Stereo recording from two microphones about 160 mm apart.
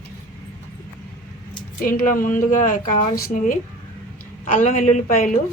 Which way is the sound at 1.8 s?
60° left (ahead or behind).